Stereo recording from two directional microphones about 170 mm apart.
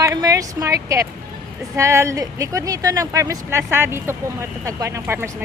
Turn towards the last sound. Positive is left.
turn(degrees=-15)  # may be behind; listen again after turning